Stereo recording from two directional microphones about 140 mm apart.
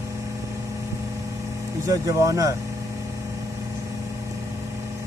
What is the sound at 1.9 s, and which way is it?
Speech, 25° right (ahead or behind).